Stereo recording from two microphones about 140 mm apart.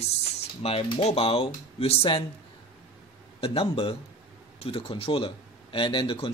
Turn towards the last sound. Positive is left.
turn(degrees=35)  # may be behind; listen again after turning